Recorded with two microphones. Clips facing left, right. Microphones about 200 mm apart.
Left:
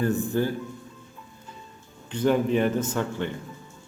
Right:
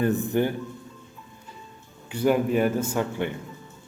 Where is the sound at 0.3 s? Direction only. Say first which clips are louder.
Right 2 dB; 20° right (ahead or behind).